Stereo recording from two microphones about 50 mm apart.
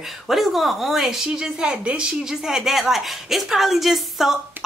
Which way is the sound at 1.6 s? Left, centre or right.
Right.